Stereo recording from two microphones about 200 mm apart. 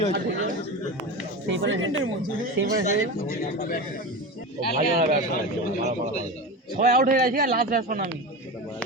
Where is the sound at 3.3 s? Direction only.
45° left (ahead or behind).